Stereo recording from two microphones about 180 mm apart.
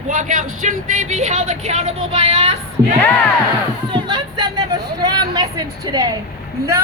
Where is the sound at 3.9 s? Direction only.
25° right (ahead or behind).